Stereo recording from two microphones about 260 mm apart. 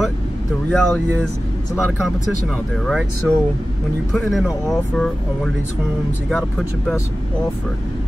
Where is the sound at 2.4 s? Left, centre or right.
Centre.